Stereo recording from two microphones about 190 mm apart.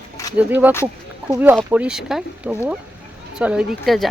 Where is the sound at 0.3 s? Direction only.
10° right (ahead or behind).